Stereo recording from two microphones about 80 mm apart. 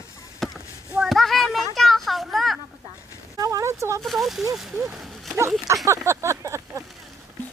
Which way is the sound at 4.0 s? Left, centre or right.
Centre.